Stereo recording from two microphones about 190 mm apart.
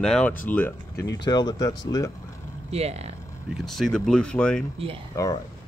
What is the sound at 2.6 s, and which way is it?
Speech, 35° right (ahead or behind).